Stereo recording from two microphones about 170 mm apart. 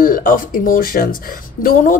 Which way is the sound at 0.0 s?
55° left (ahead or behind).